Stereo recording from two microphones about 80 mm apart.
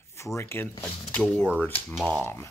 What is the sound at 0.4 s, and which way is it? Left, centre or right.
Speech, left.